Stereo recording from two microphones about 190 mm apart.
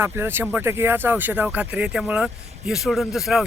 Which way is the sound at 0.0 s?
10° right (ahead or behind).